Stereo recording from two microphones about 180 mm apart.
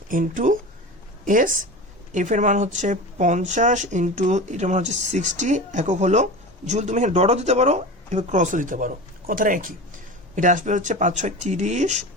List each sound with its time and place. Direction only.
0.1 s speech: 50° right (ahead or behind)